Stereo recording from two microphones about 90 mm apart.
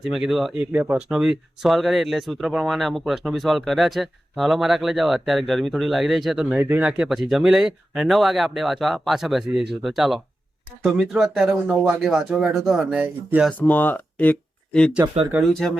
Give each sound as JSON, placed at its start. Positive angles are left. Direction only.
{"t": 0.0, "sound": "speech", "side_deg": -5}
{"t": 0.6, "sound": "speech", "side_deg": -20}
{"t": 1.1, "sound": "speech", "side_deg": -5}
{"t": 6.6, "sound": "speech", "side_deg": -20}
{"t": 6.9, "sound": "speech", "side_deg": -5}
{"t": 13.6, "sound": "speech", "side_deg": 20}
{"t": 14.7, "sound": "speech", "side_deg": 10}